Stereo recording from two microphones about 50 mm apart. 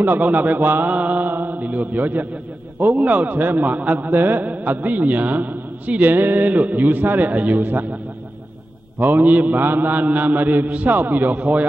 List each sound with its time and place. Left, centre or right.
0.0 s a man's voice: right
8.9 s a man's voice: right